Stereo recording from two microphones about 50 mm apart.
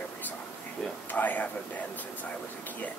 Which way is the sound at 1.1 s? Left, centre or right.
Left.